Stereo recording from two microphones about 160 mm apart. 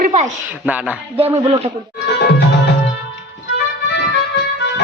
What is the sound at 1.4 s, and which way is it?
Speech, 40° right (ahead or behind).